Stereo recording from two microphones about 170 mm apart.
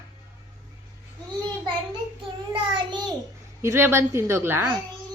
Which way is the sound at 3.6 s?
15° right (ahead or behind).